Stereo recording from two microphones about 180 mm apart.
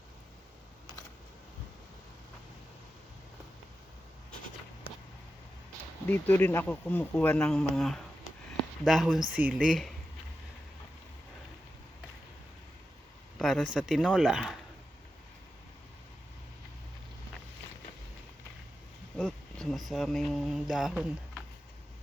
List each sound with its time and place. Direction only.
6.1 s speech: 10° left (ahead or behind)
13.4 s speech: centre (ahead or behind)
19.2 s speech: centre (ahead or behind)